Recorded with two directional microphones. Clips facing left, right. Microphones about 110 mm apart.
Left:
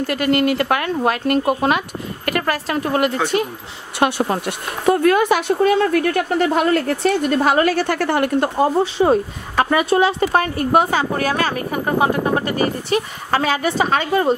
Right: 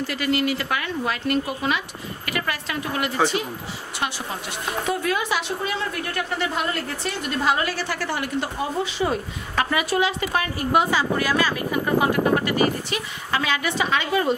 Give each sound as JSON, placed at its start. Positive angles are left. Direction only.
{"t": 0.0, "sound": "speech", "side_deg": 50}
{"t": 8.9, "sound": "a woman's voice", "side_deg": 35}